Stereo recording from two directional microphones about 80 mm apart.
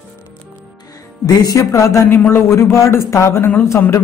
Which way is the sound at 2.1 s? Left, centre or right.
Left.